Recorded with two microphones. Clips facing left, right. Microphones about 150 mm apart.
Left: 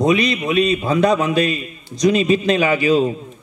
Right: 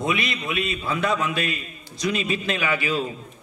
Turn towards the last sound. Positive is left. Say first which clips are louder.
# left 9 dB
turn(degrees=40)  # may be behind; listen again after turning